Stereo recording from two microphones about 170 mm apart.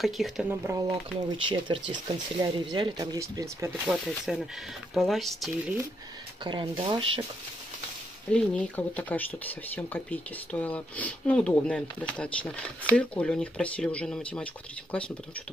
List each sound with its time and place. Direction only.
0.0 s speech: centre (ahead or behind)
0.5 s speech: 15° right (ahead or behind)
1.5 s speech: 30° right (ahead or behind); by 5.8 s centre (ahead or behind)
6.4 s speech: 30° right (ahead or behind)
8.3 s speech: 10° left (ahead or behind)